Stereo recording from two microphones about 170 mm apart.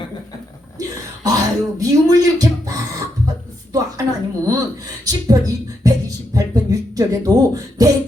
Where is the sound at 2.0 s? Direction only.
20° right (ahead or behind).